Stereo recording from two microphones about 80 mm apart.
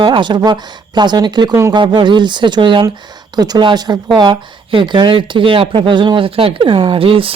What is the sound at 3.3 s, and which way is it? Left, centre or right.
Speech, right.